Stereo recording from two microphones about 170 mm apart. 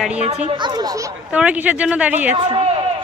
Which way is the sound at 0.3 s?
40° right (ahead or behind).